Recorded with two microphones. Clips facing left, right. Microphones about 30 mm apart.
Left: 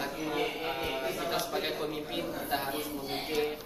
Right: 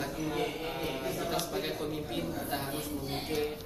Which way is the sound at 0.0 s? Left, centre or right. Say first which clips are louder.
Left 1 dB; centre.